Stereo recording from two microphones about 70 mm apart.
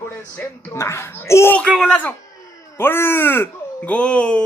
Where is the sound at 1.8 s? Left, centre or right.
Left.